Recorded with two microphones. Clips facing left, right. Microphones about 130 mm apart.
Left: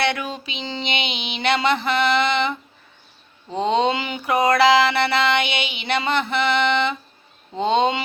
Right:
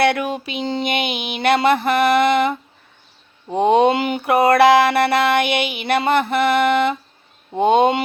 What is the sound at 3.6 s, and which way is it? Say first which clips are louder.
Child singing: right 6 dB; 55° right (ahead or behind).